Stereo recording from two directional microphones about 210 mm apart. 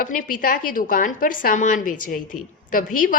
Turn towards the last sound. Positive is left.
turn(degrees=40)  # may be behind; listen again after turning